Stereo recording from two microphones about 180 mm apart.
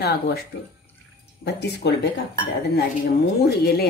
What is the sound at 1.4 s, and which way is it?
Speech, 70° left (ahead or behind).